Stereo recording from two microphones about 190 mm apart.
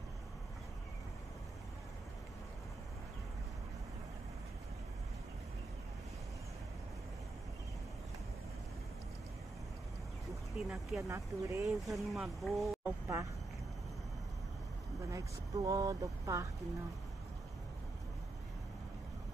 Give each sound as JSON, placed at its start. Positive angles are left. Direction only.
{"t": 10.5, "sound": "speech", "side_deg": 0}
{"t": 11.1, "sound": "speech", "side_deg": -15}
{"t": 11.8, "sound": "speech", "side_deg": 0}
{"t": 15.0, "sound": "speech", "side_deg": -15}